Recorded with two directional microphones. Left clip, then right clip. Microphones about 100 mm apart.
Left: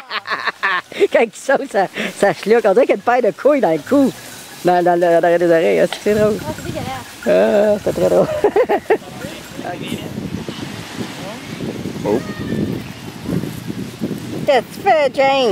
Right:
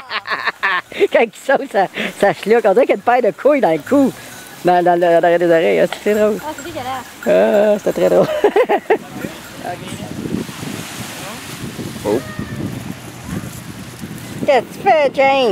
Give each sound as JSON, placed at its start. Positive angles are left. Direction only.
{"t": 0.1, "sound": "speech", "side_deg": 20}
{"t": 7.7, "sound": "speech", "side_deg": -5}
{"t": 8.5, "sound": "speech", "side_deg": 15}
{"t": 14.5, "sound": "speech", "side_deg": 20}